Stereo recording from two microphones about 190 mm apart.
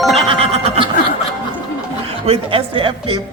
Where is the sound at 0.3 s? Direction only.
30° right (ahead or behind).